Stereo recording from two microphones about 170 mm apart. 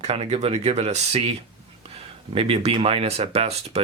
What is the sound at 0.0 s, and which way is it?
Speech, 40° right (ahead or behind).